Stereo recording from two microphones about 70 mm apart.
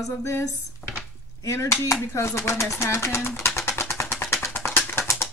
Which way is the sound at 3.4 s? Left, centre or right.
Left.